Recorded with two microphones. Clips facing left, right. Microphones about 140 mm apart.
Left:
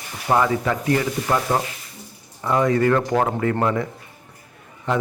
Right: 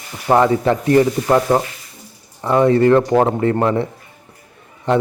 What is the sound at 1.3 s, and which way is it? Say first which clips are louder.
A man's voice: right 6 dB; 20° right (ahead or behind).